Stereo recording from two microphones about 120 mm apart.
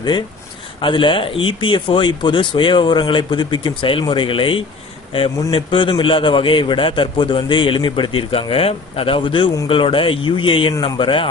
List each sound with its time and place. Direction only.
0.7 s a man's voice: 45° left (ahead or behind)